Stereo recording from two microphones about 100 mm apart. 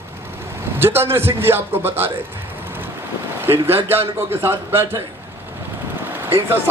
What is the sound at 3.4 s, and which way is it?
Speech, 25° right (ahead or behind).